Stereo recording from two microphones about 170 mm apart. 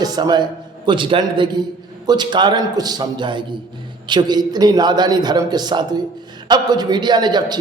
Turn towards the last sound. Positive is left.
turn(degrees=-25)  # may be behind; listen again after turning